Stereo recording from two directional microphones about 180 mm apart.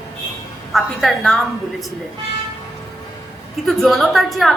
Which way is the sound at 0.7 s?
Centre (ahead or behind).